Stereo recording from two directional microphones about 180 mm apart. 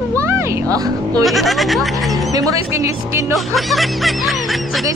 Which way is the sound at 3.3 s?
Centre (ahead or behind).